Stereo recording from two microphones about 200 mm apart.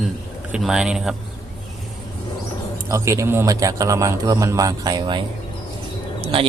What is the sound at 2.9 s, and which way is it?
A man's voice, 15° right (ahead or behind).